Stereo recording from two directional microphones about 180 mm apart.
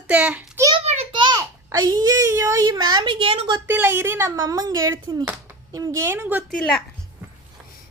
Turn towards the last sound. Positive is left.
turn(degrees=5)  # may be behind; listen again after turning